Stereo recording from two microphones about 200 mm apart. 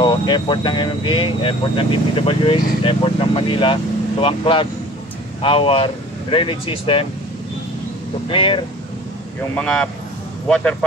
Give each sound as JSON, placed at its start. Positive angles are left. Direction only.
{"t": 0.0, "sound": "speech", "side_deg": 20}
{"t": 8.3, "sound": "speech", "side_deg": 25}
{"t": 9.6, "sound": "a man's voice", "side_deg": 5}